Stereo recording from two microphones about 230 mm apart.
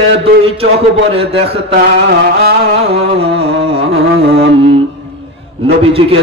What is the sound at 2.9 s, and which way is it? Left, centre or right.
Music, right.